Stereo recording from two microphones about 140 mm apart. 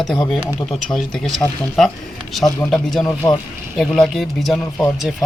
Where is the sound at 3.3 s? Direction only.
25° left (ahead or behind).